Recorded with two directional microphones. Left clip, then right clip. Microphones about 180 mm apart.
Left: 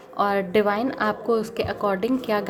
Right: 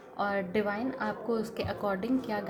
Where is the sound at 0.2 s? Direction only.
35° left (ahead or behind).